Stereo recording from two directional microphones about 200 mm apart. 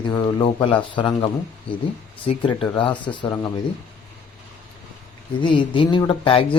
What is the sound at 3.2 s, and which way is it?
Speech, 15° left (ahead or behind).